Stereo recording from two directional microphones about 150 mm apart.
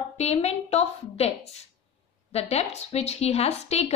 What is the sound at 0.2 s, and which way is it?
A woman's voice, 45° left (ahead or behind).